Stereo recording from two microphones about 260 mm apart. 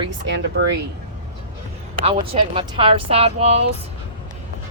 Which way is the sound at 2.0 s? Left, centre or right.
Right.